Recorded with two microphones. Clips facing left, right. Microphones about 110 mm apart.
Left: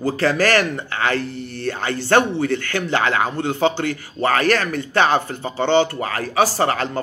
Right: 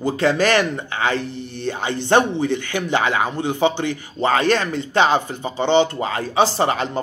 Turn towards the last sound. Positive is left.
turn(degrees=-20)  # may be behind; listen again after turning